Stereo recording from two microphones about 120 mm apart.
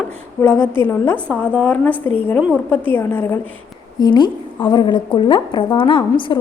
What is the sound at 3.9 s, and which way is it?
A woman's voice, 35° left (ahead or behind).